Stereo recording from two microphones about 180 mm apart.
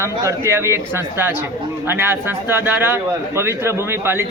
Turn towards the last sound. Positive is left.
turn(degrees=-15)  # may be behind; listen again after turning